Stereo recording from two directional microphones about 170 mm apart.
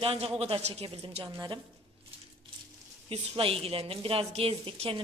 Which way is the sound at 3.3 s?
30° right (ahead or behind).